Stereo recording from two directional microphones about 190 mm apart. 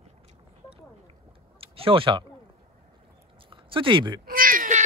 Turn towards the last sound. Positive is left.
turn(degrees=-45)  # may be behind; listen again after turning